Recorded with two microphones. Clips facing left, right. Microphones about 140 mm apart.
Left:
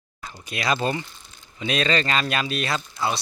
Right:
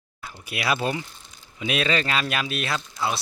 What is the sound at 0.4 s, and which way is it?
Speech, 5° right (ahead or behind).